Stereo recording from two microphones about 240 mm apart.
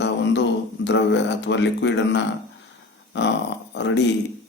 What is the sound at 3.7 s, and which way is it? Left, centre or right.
Speech, left.